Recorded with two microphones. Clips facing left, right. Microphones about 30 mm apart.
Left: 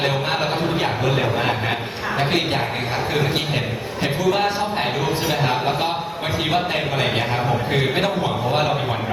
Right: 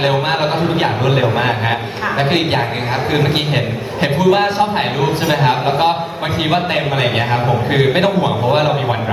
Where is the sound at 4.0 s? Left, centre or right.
Right.